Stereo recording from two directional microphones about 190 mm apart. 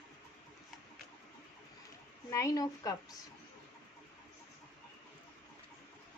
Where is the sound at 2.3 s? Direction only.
15° left (ahead or behind).